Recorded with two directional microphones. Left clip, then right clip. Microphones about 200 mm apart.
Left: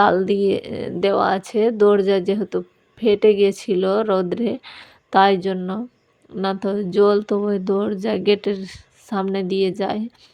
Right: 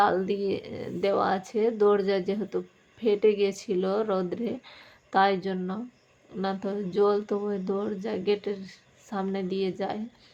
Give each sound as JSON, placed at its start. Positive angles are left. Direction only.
{"t": 0.0, "sound": "speech", "side_deg": 45}